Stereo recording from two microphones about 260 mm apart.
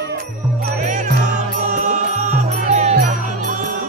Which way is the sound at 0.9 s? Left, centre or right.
Right.